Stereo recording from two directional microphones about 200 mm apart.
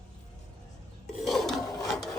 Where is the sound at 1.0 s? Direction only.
Centre (ahead or behind).